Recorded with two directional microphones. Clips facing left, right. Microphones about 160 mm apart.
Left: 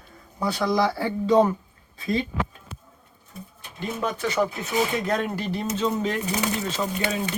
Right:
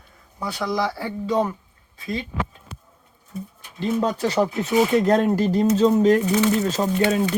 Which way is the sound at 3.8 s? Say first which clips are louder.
Right 5 dB; 35° right (ahead or behind).